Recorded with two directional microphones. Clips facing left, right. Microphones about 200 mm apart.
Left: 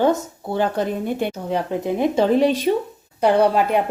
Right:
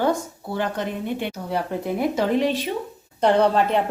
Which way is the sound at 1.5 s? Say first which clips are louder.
Left 1 dB; 20° left (ahead or behind).